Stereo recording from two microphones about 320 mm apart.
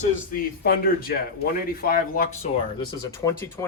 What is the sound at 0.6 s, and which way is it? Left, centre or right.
Speech, left.